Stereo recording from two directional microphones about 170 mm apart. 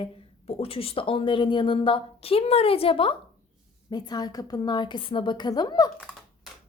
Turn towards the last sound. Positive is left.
turn(degrees=25)  # may be behind; listen again after turning